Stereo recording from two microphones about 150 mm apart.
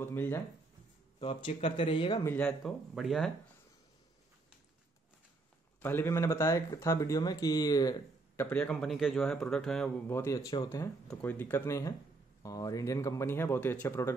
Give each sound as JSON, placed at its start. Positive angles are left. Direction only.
{"t": 0.0, "sound": "speech", "side_deg": 15}
{"t": 1.2, "sound": "speech", "side_deg": 35}
{"t": 2.2, "sound": "a man's voice", "side_deg": 10}
{"t": 5.8, "sound": "speech", "side_deg": 15}
{"t": 8.4, "sound": "a man's voice", "side_deg": 10}
{"t": 10.0, "sound": "speech", "side_deg": 20}
{"t": 11.1, "sound": "speech", "side_deg": 10}